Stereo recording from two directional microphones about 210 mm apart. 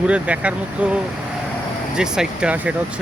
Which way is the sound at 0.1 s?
5° right (ahead or behind).